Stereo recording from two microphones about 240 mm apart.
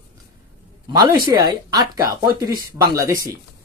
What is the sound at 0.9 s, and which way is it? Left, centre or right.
A man's voice, centre.